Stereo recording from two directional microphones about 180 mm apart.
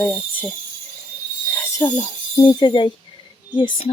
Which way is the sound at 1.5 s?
10° left (ahead or behind).